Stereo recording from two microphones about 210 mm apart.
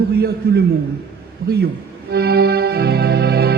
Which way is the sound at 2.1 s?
50° right (ahead or behind).